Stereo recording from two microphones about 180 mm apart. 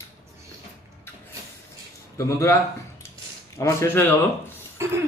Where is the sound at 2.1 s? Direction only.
15° left (ahead or behind).